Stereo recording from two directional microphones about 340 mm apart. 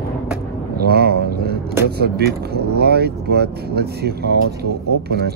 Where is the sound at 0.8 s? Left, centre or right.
Right.